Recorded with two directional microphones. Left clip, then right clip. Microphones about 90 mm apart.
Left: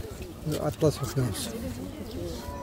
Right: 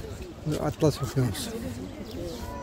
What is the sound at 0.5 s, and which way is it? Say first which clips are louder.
Speech: even; 55° right (ahead or behind).